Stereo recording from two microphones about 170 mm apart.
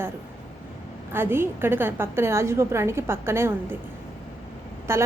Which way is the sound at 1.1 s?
15° right (ahead or behind).